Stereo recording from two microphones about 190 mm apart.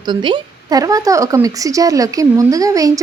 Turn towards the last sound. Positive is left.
turn(degrees=-15)  # may be behind; listen again after turning